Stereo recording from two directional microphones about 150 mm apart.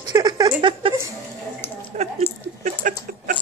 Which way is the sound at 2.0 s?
45° right (ahead or behind).